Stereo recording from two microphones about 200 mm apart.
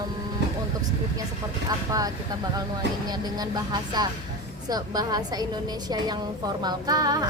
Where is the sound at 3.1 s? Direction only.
20° right (ahead or behind).